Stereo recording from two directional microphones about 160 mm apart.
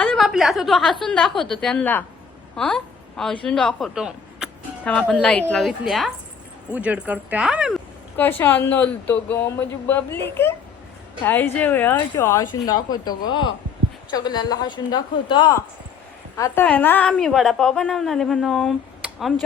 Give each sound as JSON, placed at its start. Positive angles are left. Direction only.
{"t": 0.0, "sound": "a woman's voice", "side_deg": 5}
{"t": 4.9, "sound": "a woman's voice", "side_deg": 10}
{"t": 8.1, "sound": "a woman's voice", "side_deg": 10}
{"t": 16.4, "sound": "a woman's voice", "side_deg": 10}